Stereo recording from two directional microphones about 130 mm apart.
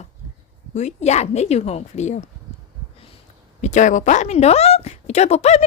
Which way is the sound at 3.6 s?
70° left (ahead or behind).